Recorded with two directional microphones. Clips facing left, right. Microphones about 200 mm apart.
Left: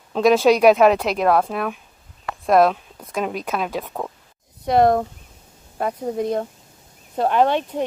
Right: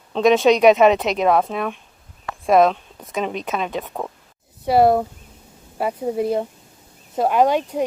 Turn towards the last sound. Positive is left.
turn(degrees=-10)  # may be behind; listen again after turning